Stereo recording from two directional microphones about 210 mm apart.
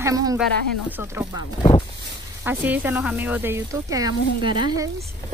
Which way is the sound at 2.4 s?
10° right (ahead or behind).